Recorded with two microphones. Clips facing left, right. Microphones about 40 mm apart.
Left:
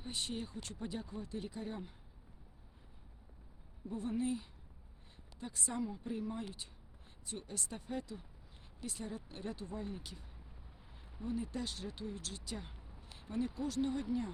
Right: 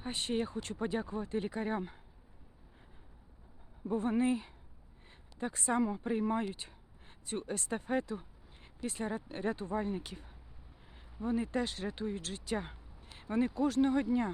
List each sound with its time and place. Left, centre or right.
0.0 s speech: right
3.8 s speech: right
11.4 s speech: right